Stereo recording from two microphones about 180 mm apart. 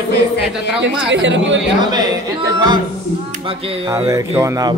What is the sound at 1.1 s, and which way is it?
Speech, 90° right.